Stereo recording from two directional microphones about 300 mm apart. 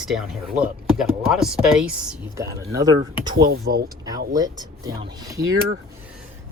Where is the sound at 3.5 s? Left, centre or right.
Right.